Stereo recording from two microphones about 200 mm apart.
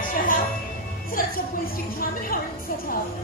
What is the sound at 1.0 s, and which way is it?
A woman's voice, 45° left (ahead or behind).